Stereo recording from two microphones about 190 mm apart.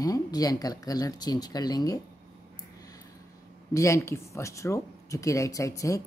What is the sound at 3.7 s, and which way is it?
Speech, 15° left (ahead or behind).